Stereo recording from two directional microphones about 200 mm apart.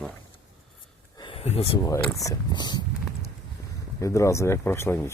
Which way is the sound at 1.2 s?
25° left (ahead or behind).